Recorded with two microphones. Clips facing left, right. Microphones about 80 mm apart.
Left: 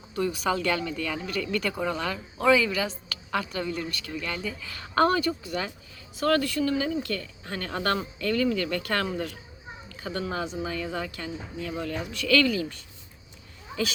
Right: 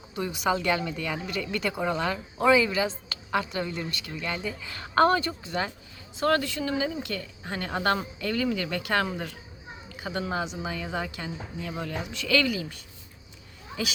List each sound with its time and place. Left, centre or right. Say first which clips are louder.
0.1 s a woman's voice: even; centre